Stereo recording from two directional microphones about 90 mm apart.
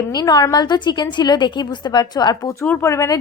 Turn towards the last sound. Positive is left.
turn(degrees=35)  # may be behind; listen again after turning